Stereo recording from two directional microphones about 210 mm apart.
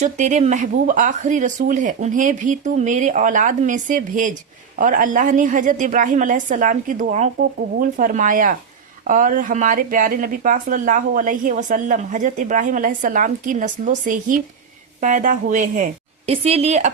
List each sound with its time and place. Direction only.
0.0 s speech: 35° right (ahead or behind)